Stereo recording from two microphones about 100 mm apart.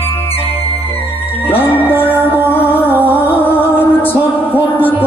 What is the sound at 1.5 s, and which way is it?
Music, 20° left (ahead or behind).